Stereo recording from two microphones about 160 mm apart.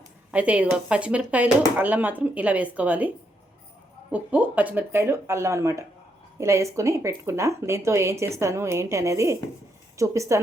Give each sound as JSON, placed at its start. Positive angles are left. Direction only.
{"t": 0.3, "sound": "speech", "side_deg": -10}
{"t": 4.1, "sound": "a woman's voice", "side_deg": -10}